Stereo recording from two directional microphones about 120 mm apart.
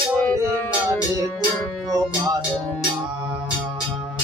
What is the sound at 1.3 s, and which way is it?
Music, 10° left (ahead or behind).